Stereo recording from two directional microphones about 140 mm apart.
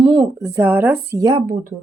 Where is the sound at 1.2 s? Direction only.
35° right (ahead or behind).